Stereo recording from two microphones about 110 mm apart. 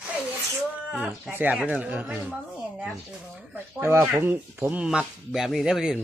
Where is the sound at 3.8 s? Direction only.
25° right (ahead or behind).